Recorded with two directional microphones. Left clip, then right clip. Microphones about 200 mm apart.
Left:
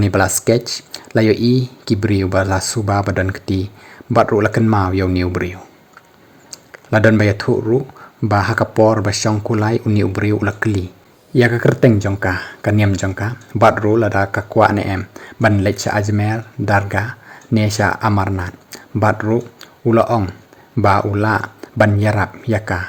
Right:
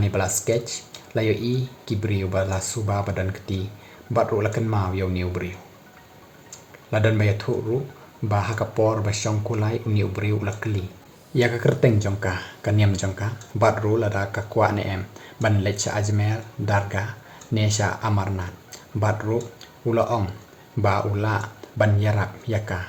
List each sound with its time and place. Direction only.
0.0 s speech: 45° left (ahead or behind)
6.9 s speech: 50° left (ahead or behind)